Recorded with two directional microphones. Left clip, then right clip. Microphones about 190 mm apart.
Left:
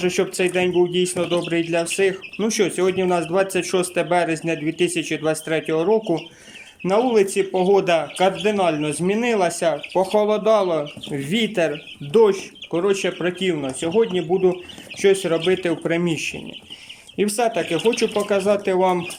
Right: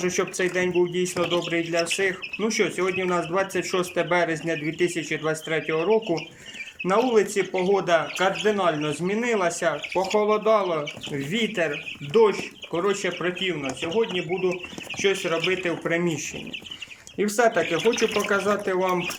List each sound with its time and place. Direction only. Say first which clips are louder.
0.0 s speech: left 4 dB; 10° left (ahead or behind)